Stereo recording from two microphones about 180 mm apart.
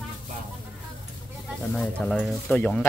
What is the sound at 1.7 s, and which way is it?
Speech, 5° left (ahead or behind).